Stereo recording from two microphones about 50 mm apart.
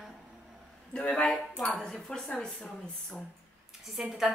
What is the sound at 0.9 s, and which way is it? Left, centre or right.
Speech, centre.